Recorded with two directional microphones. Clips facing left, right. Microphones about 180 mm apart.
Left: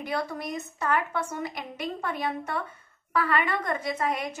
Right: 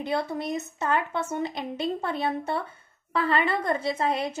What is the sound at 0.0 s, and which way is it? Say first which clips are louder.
A woman's voice: right 3 dB; 25° right (ahead or behind).